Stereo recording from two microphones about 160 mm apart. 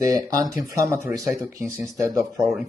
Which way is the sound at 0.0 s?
25° right (ahead or behind).